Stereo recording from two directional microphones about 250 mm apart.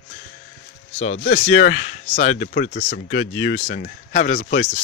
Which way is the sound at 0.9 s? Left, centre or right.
Left.